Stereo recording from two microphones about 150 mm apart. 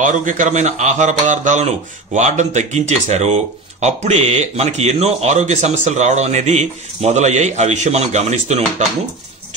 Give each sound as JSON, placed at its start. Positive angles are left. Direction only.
{"t": 0.0, "sound": "speech", "side_deg": -55}